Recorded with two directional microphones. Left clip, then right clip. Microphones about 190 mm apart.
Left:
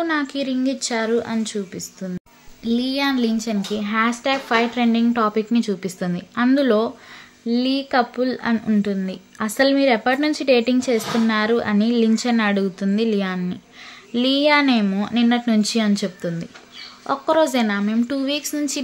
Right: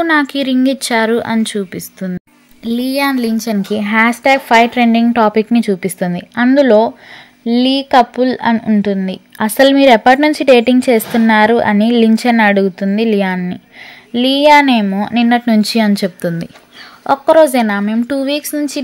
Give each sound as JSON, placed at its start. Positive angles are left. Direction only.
{"t": 0.0, "sound": "a woman's voice", "side_deg": -40}